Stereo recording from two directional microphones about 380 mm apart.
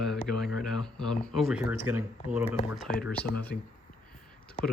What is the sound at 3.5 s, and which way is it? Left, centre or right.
Speech, left.